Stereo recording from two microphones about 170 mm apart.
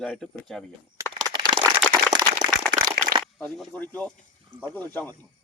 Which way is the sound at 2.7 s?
55° right (ahead or behind).